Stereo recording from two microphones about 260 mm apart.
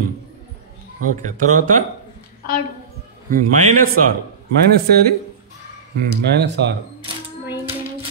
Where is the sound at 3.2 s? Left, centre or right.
Right.